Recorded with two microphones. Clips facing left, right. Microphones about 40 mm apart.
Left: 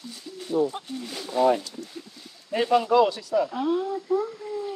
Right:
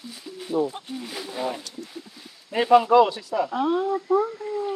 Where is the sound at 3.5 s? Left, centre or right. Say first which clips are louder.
Right 3 dB; right.